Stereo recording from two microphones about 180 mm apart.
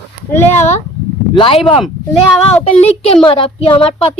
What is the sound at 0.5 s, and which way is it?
Speech, 40° left (ahead or behind).